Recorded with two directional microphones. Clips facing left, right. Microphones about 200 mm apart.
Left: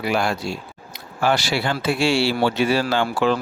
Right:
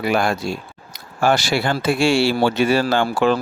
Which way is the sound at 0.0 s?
50° right (ahead or behind).